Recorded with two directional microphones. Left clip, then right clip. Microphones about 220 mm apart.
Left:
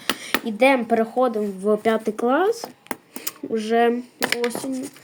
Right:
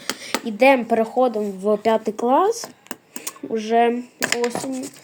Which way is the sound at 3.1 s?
5° left (ahead or behind).